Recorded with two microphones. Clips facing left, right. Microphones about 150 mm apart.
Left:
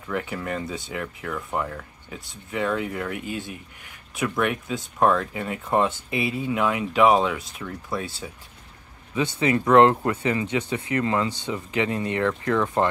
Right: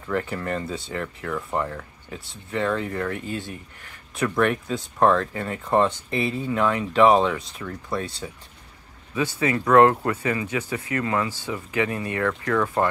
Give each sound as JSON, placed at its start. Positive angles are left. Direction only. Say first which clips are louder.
{"t": 0.1, "sound": "speech", "louder": "right 2 dB", "side_deg": 5}
{"t": 9.1, "sound": "speech", "louder": "left 1 dB", "side_deg": 20}